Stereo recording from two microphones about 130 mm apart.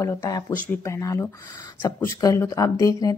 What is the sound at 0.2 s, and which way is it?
A woman's voice, 30° left (ahead or behind).